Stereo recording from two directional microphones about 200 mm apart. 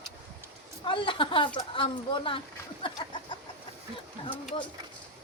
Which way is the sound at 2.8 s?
25° left (ahead or behind).